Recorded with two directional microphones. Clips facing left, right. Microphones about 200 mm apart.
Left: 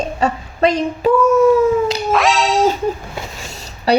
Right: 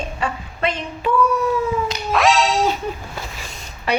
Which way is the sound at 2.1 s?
Centre (ahead or behind).